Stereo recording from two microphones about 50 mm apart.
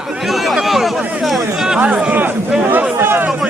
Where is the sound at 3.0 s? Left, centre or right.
Right.